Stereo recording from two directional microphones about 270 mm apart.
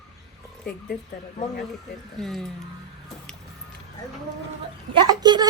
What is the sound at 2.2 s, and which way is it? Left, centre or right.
Speech, centre.